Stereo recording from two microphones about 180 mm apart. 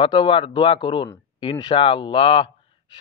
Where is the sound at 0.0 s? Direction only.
25° left (ahead or behind).